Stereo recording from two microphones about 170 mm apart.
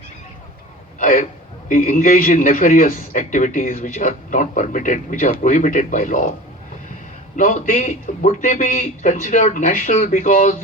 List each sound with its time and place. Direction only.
0.9 s a man's voice: 50° left (ahead or behind)
7.3 s a man's voice: 50° left (ahead or behind)